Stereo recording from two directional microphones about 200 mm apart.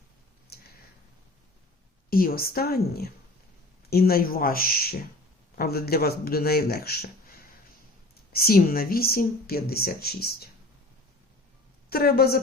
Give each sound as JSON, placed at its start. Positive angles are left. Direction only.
{"t": 0.5, "sound": "a sound", "side_deg": 50}
{"t": 2.0, "sound": "speech", "side_deg": 45}
{"t": 11.9, "sound": "speech", "side_deg": 50}